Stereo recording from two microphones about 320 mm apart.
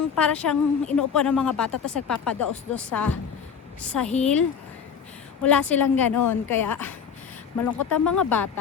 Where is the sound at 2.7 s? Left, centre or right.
Centre.